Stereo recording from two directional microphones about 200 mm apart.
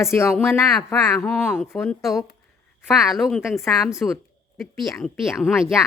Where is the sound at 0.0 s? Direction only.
15° left (ahead or behind).